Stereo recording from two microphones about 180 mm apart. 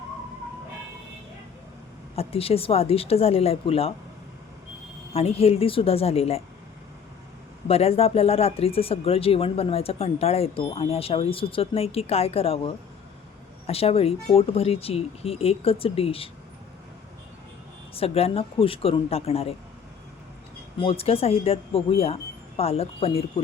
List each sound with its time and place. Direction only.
2.1 s speech: 35° left (ahead or behind)
5.1 s speech: 35° left (ahead or behind)
7.7 s speech: 35° left (ahead or behind)
17.9 s speech: 35° left (ahead or behind)
20.7 s speech: 30° left (ahead or behind)